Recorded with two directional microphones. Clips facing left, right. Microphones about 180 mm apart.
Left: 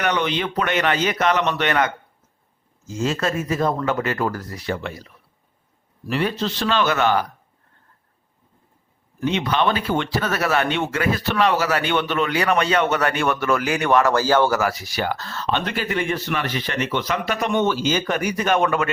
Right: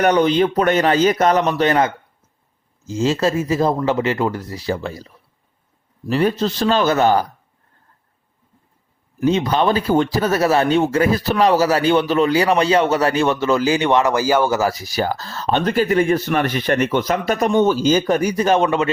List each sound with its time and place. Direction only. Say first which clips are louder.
0.0 s speech: right 8 dB; 40° right (ahead or behind)
9.2 s speech: right 4 dB; 40° right (ahead or behind); by 14.6 s 10° right (ahead or behind)
14.6 s speech: right 4 dB; 40° right (ahead or behind)